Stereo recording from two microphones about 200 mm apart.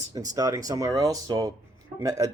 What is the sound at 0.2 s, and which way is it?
A man's voice, 15° right (ahead or behind).